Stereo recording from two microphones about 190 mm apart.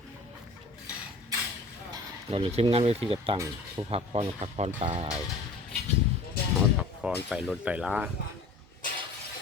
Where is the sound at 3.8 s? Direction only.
30° right (ahead or behind).